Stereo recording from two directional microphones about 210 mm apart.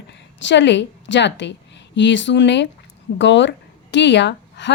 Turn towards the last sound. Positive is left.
turn(degrees=55)  # may be behind; listen again after turning